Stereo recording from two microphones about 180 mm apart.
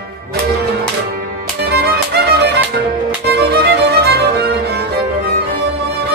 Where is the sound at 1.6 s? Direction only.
60° right (ahead or behind).